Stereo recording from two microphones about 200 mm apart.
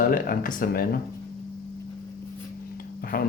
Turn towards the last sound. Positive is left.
turn(degrees=45)  # may be behind; listen again after turning